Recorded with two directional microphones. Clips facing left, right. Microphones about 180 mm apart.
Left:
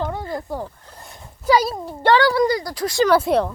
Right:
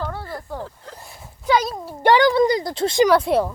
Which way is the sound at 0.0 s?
15° left (ahead or behind).